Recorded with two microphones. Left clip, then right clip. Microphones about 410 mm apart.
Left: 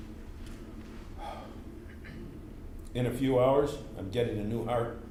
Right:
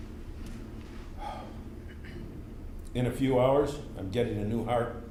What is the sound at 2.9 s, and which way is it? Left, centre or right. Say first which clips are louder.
A man's voice: right 1 dB; left.